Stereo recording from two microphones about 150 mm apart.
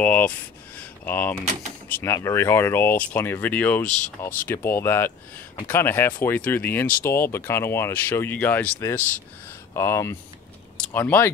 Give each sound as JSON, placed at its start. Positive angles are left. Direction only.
{"t": 0.0, "sound": "speech", "side_deg": 10}
{"t": 0.7, "sound": "a sound", "side_deg": 10}
{"t": 1.9, "sound": "speech", "side_deg": 15}